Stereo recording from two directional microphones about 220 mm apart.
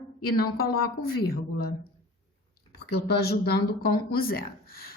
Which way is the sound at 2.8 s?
45° left (ahead or behind).